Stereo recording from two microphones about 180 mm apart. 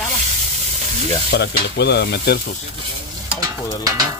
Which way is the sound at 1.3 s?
70° left (ahead or behind).